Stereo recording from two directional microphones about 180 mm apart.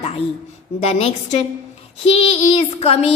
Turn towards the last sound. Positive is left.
turn(degrees=35)  # may be behind; listen again after turning